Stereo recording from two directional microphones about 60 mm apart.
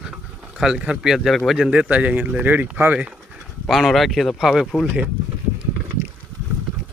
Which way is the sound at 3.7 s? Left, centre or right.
Centre.